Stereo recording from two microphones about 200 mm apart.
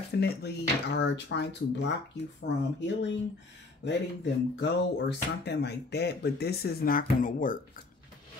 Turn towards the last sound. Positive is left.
turn(degrees=40)  # may be behind; listen again after turning